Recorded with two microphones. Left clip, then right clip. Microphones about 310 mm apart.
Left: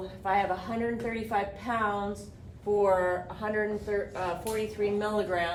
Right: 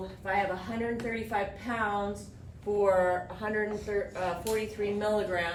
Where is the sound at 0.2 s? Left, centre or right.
Centre.